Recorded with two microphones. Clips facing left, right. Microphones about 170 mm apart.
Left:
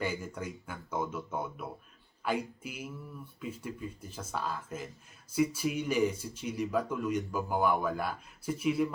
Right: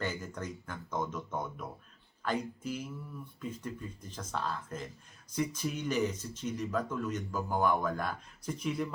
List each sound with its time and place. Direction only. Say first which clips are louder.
0.0 s speech: left 2 dB; 10° left (ahead or behind)